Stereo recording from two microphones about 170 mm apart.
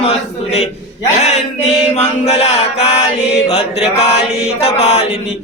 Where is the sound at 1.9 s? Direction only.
40° left (ahead or behind).